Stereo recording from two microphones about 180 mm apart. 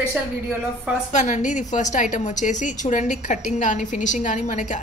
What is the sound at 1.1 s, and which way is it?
A woman's voice, 45° left (ahead or behind).